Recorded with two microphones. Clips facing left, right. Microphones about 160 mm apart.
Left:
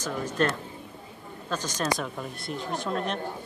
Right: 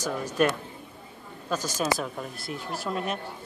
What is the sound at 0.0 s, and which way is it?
Speech, 10° right (ahead or behind).